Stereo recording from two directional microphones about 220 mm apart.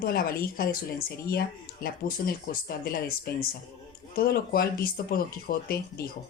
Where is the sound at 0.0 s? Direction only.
45° left (ahead or behind).